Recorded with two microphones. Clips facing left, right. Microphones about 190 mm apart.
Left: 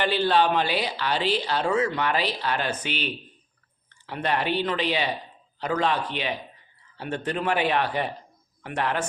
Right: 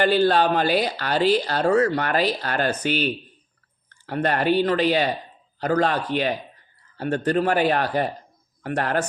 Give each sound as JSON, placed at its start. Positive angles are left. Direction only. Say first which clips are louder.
{"t": 0.0, "sound": "speech", "louder": "right 4 dB", "side_deg": -45}